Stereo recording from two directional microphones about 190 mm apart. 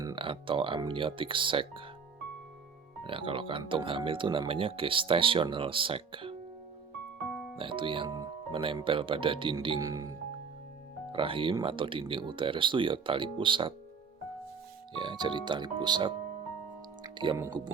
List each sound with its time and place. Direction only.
0.0 s speech: 25° right (ahead or behind)
3.0 s speech: 30° right (ahead or behind)
7.5 s speech: 25° right (ahead or behind)
14.9 s speech: 25° right (ahead or behind)
17.0 s music: 25° right (ahead or behind)